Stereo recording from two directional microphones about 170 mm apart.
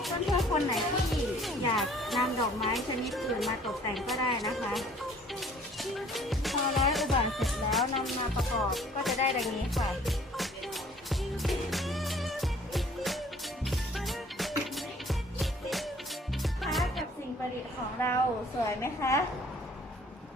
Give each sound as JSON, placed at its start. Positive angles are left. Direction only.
{"t": 0.0, "sound": "speech", "side_deg": 0}
{"t": 9.4, "sound": "music", "side_deg": 0}
{"t": 18.0, "sound": "a woman's voice", "side_deg": 15}